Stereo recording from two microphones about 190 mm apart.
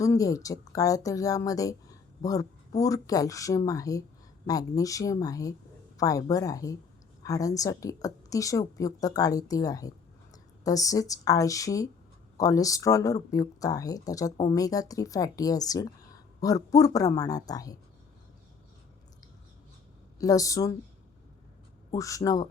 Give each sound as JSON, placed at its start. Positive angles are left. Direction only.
{"t": 0.0, "sound": "speech", "side_deg": 15}
{"t": 20.1, "sound": "speech", "side_deg": 20}
{"t": 21.9, "sound": "speech", "side_deg": 15}